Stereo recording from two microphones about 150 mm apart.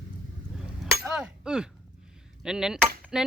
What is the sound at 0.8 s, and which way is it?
Hammer, 5° right (ahead or behind).